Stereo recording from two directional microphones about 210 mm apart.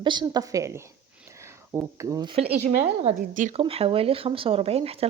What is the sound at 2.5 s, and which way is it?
Speech, 30° right (ahead or behind).